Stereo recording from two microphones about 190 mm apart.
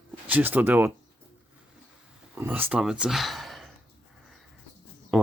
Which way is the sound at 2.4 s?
10° right (ahead or behind).